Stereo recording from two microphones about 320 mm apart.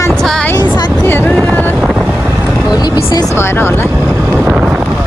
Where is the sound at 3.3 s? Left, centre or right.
Centre.